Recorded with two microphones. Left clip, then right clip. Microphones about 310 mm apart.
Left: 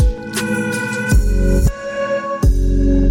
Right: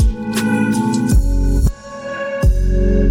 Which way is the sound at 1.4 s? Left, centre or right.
Centre.